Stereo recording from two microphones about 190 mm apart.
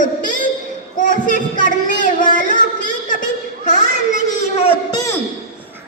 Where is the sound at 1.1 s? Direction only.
45° left (ahead or behind).